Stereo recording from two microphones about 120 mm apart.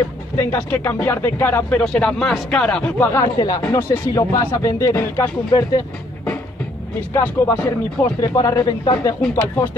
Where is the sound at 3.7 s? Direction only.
20° left (ahead or behind).